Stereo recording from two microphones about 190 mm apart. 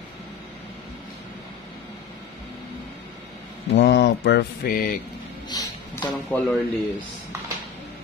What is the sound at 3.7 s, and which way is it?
Mantra, 65° left (ahead or behind).